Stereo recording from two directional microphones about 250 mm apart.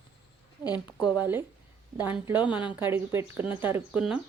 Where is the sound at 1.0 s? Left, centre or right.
Centre.